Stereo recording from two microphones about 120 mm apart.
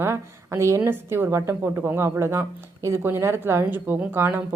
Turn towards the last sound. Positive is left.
turn(degrees=-15)  # may be behind; listen again after turning